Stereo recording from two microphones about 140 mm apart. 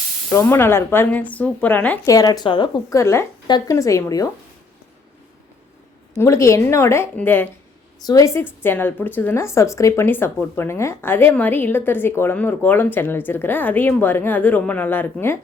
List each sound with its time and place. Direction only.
0.3 s a woman's voice: 15° left (ahead or behind)
2.0 s speech: 25° left (ahead or behind)
3.0 s a woman's voice: 20° left (ahead or behind)
6.1 s a woman's voice: 20° left (ahead or behind)